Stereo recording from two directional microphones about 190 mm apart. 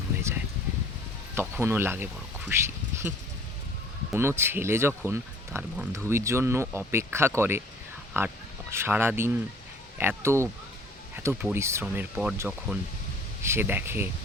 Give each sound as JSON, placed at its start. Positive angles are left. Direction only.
{"t": 1.4, "sound": "speech", "side_deg": -10}
{"t": 4.1, "sound": "speech", "side_deg": -15}
{"t": 11.5, "sound": "speech", "side_deg": -15}